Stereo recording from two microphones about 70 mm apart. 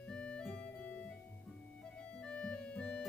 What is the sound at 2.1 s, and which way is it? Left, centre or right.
Organ, centre.